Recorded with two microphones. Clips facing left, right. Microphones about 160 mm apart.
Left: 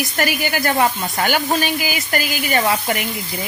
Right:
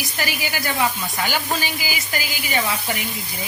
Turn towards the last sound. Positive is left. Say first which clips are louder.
# left 5 dB
turn(degrees=60)  # may be behind; listen again after turning